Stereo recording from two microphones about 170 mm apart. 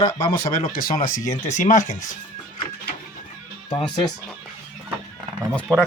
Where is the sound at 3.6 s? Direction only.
25° left (ahead or behind).